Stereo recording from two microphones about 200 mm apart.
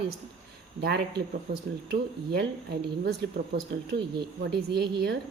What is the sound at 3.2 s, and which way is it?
Speech, 60° right (ahead or behind).